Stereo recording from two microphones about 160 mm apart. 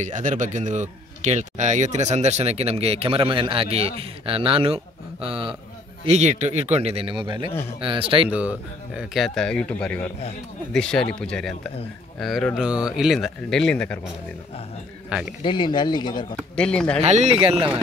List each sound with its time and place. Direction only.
0.0 s a man's voice: 50° right (ahead or behind); by 8.3 s 35° right (ahead or behind)
8.3 s a man's voice: 10° right (ahead or behind)
15.1 s speech: 5° right (ahead or behind)
15.4 s speech: 30° left (ahead or behind)
16.5 s a man's voice: 5° left (ahead or behind)
17.0 s a man's voice: 45° right (ahead or behind)